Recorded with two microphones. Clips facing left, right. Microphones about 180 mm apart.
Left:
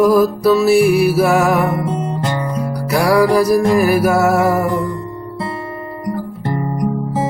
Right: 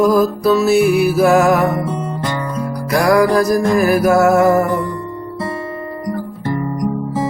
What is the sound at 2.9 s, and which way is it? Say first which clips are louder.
Music: even; 10° left (ahead or behind).